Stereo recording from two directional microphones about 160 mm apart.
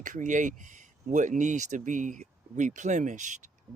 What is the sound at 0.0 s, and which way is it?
Speech, 50° right (ahead or behind).